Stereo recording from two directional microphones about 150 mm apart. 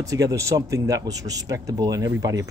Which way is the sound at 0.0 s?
20° right (ahead or behind).